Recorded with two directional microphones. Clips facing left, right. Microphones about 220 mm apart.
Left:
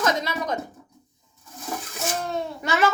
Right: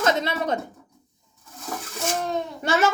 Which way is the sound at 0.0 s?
25° right (ahead or behind).